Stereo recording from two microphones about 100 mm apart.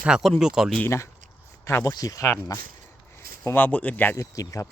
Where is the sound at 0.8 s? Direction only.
30° left (ahead or behind).